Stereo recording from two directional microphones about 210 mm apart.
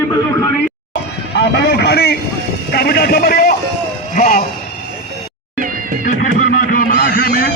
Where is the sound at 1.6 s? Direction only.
50° left (ahead or behind).